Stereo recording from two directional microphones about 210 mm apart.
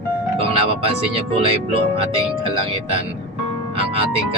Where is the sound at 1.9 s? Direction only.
25° right (ahead or behind).